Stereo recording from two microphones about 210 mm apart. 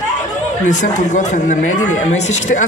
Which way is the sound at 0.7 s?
35° left (ahead or behind).